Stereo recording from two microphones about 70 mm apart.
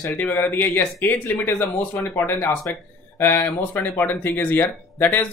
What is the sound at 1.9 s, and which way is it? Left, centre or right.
Speech, left.